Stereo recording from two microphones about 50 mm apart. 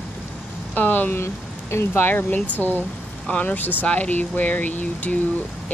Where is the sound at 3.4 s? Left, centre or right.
Left.